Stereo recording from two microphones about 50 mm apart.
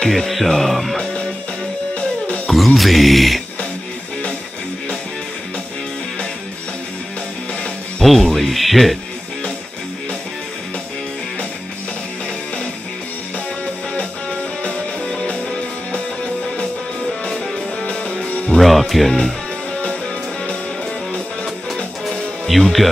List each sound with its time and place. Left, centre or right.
0.0 s speech: centre
2.0 s music: left
2.4 s speech: centre
8.0 s speech: centre
13.9 s music: centre
18.6 s music: centre
22.0 s music: centre